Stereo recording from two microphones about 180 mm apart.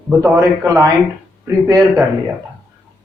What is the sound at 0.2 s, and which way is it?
Speech, 15° right (ahead or behind).